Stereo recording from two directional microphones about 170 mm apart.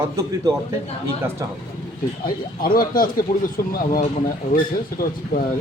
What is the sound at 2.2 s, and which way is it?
Speech, 60° left (ahead or behind).